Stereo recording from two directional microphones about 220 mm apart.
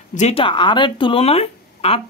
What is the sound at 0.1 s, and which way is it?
Speech, 30° left (ahead or behind).